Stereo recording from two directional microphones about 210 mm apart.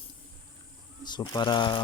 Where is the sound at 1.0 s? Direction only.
20° left (ahead or behind).